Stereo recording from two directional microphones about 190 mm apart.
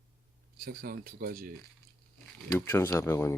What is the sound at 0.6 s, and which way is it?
Speech, 50° right (ahead or behind).